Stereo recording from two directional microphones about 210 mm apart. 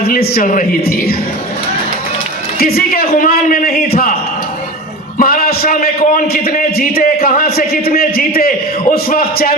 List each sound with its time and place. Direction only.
0.1 s a man's voice: 45° left (ahead or behind)
2.6 s a man's voice: 45° left (ahead or behind)
5.1 s a man's voice: 45° left (ahead or behind)